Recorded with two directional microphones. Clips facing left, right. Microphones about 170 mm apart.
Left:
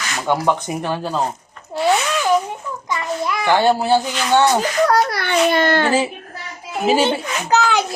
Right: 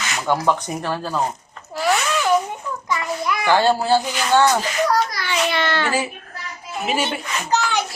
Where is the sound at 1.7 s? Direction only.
25° left (ahead or behind).